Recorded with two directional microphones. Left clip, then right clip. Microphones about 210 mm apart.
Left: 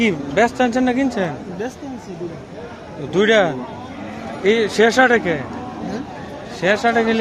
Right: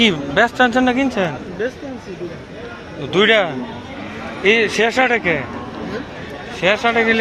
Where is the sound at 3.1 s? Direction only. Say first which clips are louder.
Right 1 dB; 15° left (ahead or behind).